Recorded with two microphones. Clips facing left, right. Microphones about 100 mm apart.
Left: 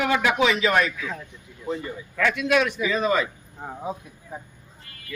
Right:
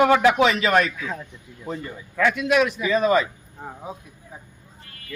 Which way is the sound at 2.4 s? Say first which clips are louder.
Right 1 dB; 10° right (ahead or behind).